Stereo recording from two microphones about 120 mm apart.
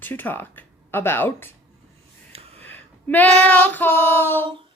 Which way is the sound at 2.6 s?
15° left (ahead or behind).